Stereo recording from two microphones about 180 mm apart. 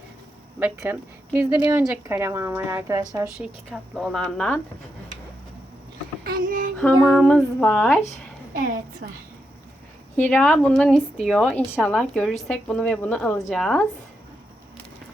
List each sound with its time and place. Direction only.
0.6 s a woman's voice: 10° right (ahead or behind)
3.7 s a woman's voice: centre (ahead or behind)
6.2 s child singing: 50° right (ahead or behind)
7.1 s a woman's voice: 5° left (ahead or behind)
8.5 s a woman's voice: 50° right (ahead or behind)
10.2 s a woman's voice: 10° left (ahead or behind)